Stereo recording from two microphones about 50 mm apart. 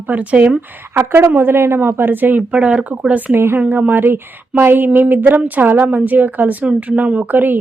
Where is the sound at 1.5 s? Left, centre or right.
Right.